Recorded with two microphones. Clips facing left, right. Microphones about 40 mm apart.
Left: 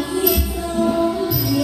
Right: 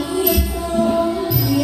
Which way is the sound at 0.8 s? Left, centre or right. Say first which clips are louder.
Right 1 dB; centre.